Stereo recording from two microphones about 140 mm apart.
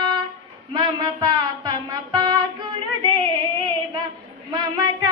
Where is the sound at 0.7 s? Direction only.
30° right (ahead or behind).